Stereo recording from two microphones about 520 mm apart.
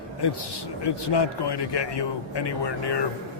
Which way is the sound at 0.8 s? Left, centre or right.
Left.